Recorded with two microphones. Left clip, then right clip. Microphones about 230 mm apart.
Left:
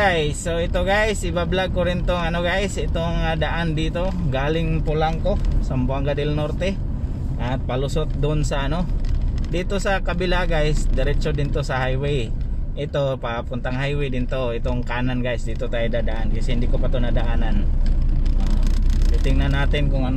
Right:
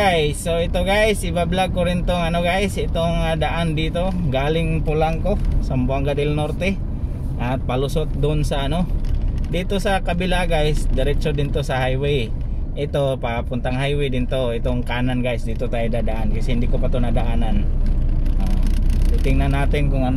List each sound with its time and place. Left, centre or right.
0.0 s speech: centre
8.0 s speech: centre
19.3 s speech: centre